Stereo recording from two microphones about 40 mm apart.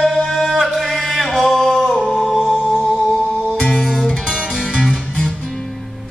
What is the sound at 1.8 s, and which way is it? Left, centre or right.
Music, centre.